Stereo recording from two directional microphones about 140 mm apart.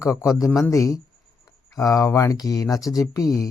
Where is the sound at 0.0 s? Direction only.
20° left (ahead or behind).